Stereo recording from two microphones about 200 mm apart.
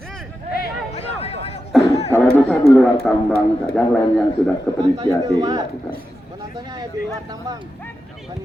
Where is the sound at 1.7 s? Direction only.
Centre (ahead or behind).